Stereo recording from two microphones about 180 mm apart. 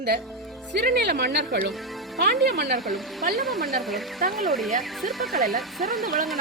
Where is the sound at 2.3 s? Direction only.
Centre (ahead or behind).